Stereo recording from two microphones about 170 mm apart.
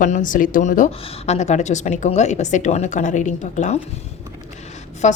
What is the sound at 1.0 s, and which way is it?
A woman's voice, 35° left (ahead or behind).